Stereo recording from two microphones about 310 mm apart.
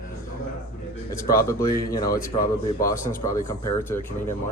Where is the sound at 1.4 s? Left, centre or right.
Centre.